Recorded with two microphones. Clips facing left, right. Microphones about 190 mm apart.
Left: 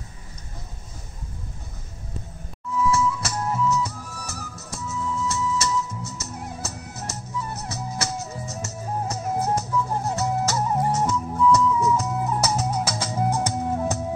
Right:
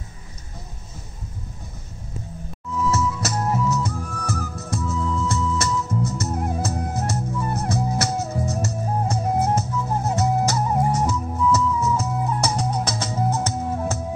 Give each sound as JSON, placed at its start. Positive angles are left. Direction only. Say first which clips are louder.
{"t": 2.9, "sound": "music", "louder": "right 1 dB", "side_deg": -40}
{"t": 8.6, "sound": "music", "louder": "right 4 dB", "side_deg": -30}
{"t": 10.1, "sound": "music", "louder": "right 4 dB", "side_deg": -15}